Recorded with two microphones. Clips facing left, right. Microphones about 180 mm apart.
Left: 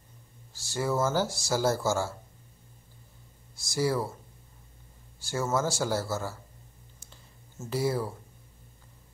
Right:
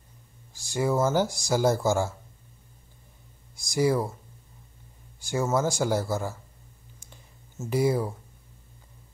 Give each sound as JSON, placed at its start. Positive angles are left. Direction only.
{"t": 0.5, "sound": "speech", "side_deg": -15}
{"t": 3.5, "sound": "speech", "side_deg": -15}
{"t": 5.2, "sound": "speech", "side_deg": -15}
{"t": 7.0, "sound": "clicking", "side_deg": -10}